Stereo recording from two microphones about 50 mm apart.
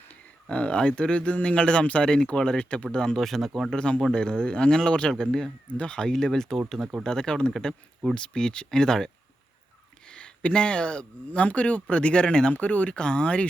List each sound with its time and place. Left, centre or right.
0.4 s speech: left
3.2 s speech: centre
3.8 s speech: left
10.1 s a sound: centre
11.3 s speech: left
12.5 s speech: left